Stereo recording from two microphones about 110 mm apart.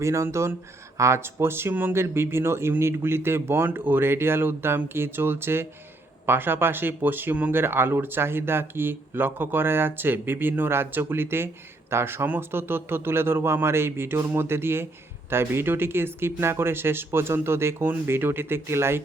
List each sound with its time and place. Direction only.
0.0 s speech: 25° right (ahead or behind)